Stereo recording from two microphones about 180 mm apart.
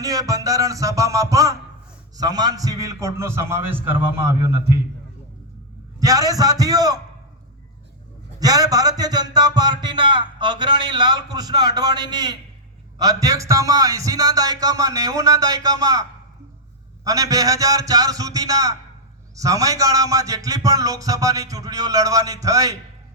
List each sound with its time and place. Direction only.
0.0 s music: 20° right (ahead or behind)
2.1 s a man's voice: 20° right (ahead or behind)
6.0 s speech: 20° right (ahead or behind)
8.4 s speech: 20° right (ahead or behind)